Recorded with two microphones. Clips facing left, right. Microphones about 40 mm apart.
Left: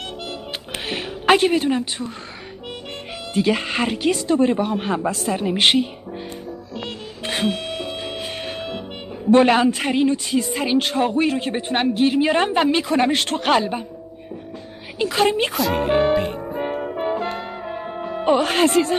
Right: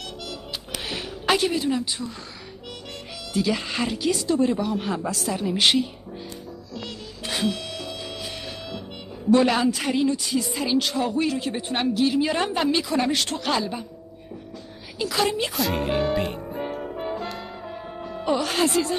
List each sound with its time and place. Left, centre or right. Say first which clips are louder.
0.8 s a woman's voice: left 7 dB; left
3.3 s speech: left 5 dB; left
6.8 s music: left 5 dB; left
9.3 s speech: left 5 dB; left
15.0 s speech: left 5 dB; left
15.5 s speech: left 4 dB; centre
16.1 s music: left 5 dB; centre
16.6 s music: left 7 dB; left